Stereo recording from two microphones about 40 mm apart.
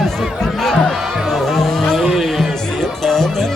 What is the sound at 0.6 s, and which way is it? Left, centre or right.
Music, centre.